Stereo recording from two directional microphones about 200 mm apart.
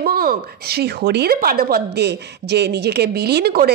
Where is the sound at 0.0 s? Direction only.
45° right (ahead or behind).